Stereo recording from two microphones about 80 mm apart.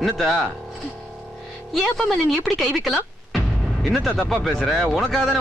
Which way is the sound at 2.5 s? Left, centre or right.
Centre.